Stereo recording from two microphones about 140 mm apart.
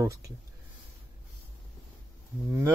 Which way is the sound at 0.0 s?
20° right (ahead or behind).